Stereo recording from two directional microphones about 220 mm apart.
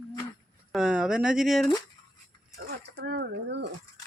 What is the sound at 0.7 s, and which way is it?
Speech, 5° right (ahead or behind).